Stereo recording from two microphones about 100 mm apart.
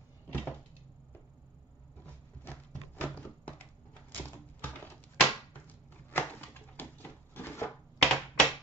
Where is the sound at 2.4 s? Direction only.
20° left (ahead or behind).